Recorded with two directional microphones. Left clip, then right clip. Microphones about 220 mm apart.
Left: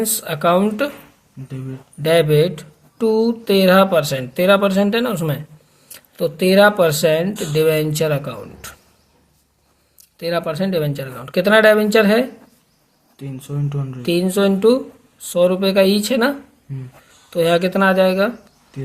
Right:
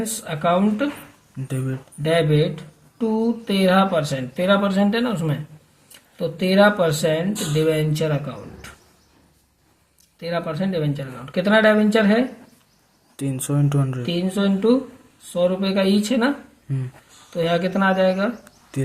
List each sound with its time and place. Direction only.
0.0 s speech: 35° left (ahead or behind)
1.5 s speech: 30° right (ahead or behind)
2.0 s speech: 35° left (ahead or behind)
10.2 s speech: 35° left (ahead or behind)
13.1 s speech: 30° right (ahead or behind)
14.0 s speech: 35° left (ahead or behind)
17.3 s speech: 30° left (ahead or behind)